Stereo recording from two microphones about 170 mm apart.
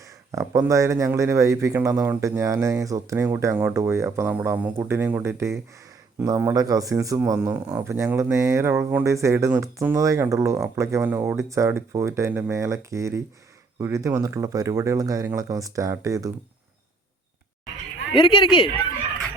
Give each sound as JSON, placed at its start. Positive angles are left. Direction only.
{"t": 0.0, "sound": "speech", "side_deg": -20}
{"t": 18.1, "sound": "speech", "side_deg": 30}